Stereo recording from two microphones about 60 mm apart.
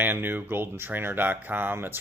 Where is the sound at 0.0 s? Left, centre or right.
Right.